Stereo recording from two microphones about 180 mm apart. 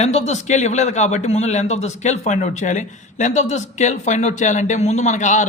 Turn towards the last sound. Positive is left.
turn(degrees=45)  # may be behind; listen again after turning